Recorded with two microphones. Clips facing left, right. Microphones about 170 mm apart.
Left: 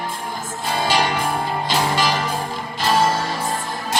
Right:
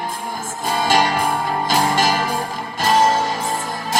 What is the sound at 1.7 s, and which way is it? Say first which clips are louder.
Music: right 2 dB; 45° right (ahead or behind).